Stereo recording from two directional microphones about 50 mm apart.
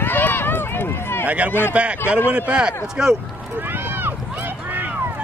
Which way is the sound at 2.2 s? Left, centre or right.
Right.